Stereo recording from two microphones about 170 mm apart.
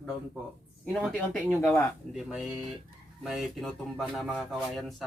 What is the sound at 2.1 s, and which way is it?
Speech, 5° right (ahead or behind).